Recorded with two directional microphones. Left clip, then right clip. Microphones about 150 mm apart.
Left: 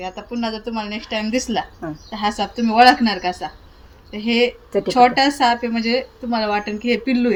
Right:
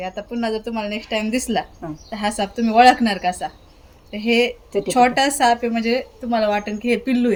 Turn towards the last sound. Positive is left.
turn(degrees=-40)  # may be behind; listen again after turning